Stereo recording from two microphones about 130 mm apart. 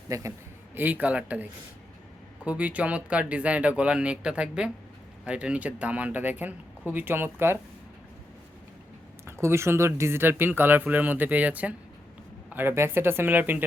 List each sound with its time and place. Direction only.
0.1 s speech: 25° right (ahead or behind)
9.2 s speech: 20° right (ahead or behind)